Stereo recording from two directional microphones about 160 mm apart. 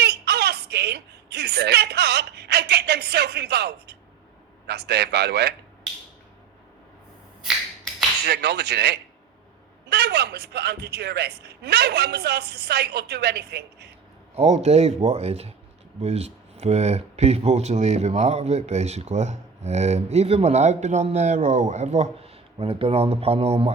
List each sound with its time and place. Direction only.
0.0 s a sound: 90° right
4.6 s speech: 90° right
8.3 s speech: 90° right
14.3 s speech: 45° right (ahead or behind)